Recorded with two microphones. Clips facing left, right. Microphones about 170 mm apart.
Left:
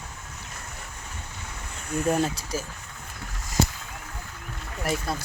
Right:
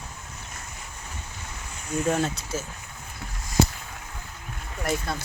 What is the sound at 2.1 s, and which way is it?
Speech, 10° left (ahead or behind).